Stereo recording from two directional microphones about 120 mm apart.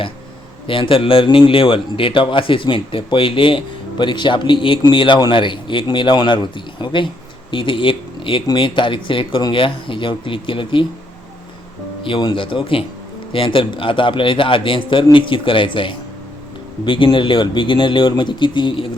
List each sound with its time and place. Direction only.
0.7 s speech: 45° left (ahead or behind)
12.0 s speech: 45° left (ahead or behind)